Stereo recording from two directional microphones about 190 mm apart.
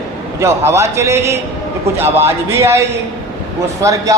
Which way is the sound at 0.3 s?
15° right (ahead or behind).